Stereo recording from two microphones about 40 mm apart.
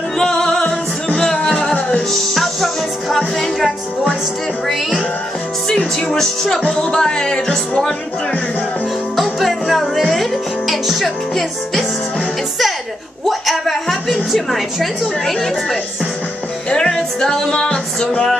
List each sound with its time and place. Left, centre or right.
0.2 s music: centre
2.1 s music: centre
6.1 s music: centre
6.7 s music: centre
9.1 s music: centre
10.7 s a woman's voice: centre
13.2 s a woman's voice: centre
16.7 s music: centre